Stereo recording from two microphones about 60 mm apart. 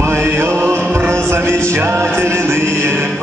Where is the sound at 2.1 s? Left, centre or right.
Right.